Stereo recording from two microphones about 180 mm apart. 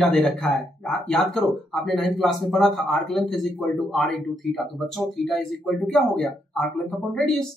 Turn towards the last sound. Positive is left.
turn(degrees=5)  # may be behind; listen again after turning